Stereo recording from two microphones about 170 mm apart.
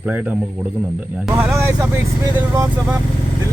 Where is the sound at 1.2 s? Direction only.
10° right (ahead or behind).